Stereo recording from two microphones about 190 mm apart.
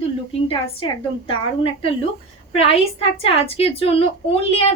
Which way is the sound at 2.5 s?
30° left (ahead or behind).